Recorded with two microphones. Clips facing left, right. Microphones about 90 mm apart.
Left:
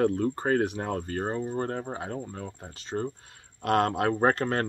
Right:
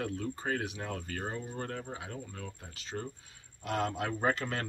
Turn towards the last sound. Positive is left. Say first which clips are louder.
# left 7 dB
turn(degrees=45)  # may be behind; listen again after turning